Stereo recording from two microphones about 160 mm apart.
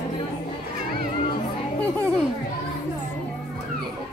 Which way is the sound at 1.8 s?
10° left (ahead or behind).